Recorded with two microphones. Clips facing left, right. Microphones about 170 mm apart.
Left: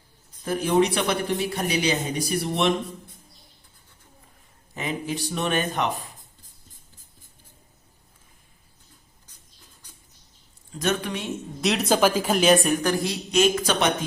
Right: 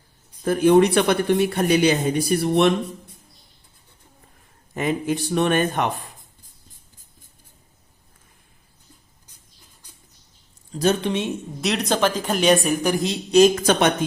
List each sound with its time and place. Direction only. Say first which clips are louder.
0.4 s speech: right 6 dB; 55° right (ahead or behind)
4.7 s speech: right 6 dB; 50° right (ahead or behind)
10.7 s speech: right 5 dB; 35° right (ahead or behind)
11.6 s a woman's voice: left 1 dB; centre (ahead or behind)
12.8 s a woman's voice: right 2 dB; 20° right (ahead or behind)
13.3 s speech: right 7 dB; 40° right (ahead or behind)